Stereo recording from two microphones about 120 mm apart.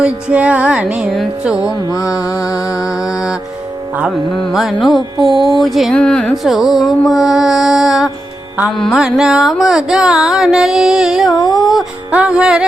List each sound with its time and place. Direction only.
0.0 s music: 10° right (ahead or behind)
2.2 s music: 25° left (ahead or behind)
2.5 s music: 5° right (ahead or behind)